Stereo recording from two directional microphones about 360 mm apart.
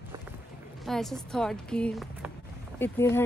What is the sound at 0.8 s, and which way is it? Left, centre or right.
A woman's voice, centre.